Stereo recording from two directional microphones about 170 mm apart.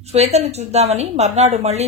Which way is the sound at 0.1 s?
40° right (ahead or behind).